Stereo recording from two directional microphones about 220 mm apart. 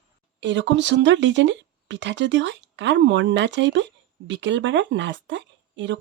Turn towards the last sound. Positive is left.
turn(degrees=-55)  # may be behind; listen again after turning